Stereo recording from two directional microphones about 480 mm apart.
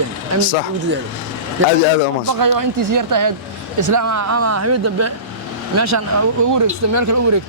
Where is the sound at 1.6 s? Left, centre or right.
Right.